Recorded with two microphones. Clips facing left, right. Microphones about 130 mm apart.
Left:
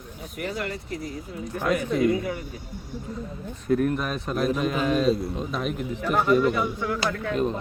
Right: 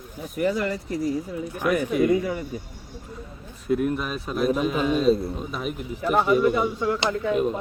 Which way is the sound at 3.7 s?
15° right (ahead or behind).